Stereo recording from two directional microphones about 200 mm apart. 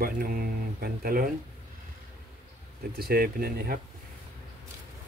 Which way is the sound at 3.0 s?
50° right (ahead or behind).